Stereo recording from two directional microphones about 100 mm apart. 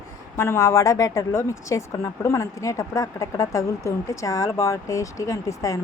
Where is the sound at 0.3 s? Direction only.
25° left (ahead or behind).